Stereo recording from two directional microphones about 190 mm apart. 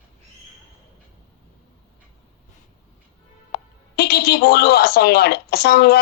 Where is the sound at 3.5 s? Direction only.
55° left (ahead or behind).